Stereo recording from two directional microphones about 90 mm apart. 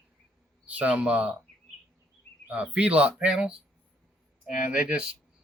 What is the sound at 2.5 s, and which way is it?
Speech, 15° right (ahead or behind).